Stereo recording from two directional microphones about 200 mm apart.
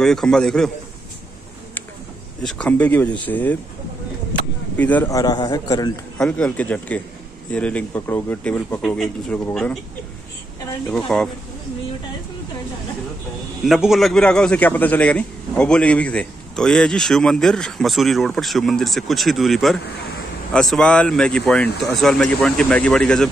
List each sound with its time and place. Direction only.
0.0 s a man's voice: 5° left (ahead or behind)
2.4 s speech: 5° left (ahead or behind)
4.7 s a man's voice: 10° left (ahead or behind)
6.1 s a man's voice: 5° left (ahead or behind)
11.1 s a man's voice: 5° left (ahead or behind)
13.7 s a man's voice: centre (ahead or behind)